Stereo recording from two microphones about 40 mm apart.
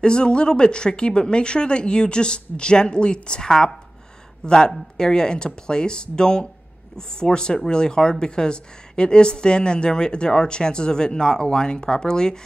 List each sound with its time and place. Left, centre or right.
0.0 s speech: left